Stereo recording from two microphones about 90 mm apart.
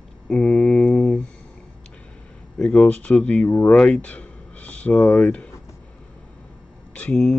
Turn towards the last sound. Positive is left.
turn(degrees=15)  # may be behind; listen again after turning